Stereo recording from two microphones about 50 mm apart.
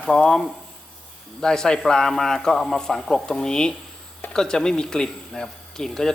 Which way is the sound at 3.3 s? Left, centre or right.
Centre.